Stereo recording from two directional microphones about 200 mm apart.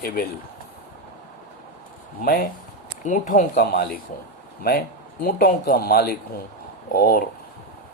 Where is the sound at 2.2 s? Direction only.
50° left (ahead or behind).